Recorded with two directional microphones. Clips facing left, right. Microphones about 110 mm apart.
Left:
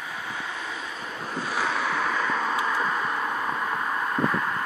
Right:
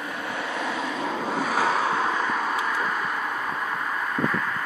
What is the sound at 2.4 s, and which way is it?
Vehicle, 5° right (ahead or behind).